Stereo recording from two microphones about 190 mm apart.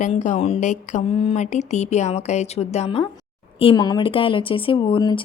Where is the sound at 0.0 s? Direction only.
40° left (ahead or behind).